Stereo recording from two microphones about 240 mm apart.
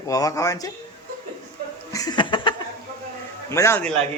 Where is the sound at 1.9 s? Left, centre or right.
Centre.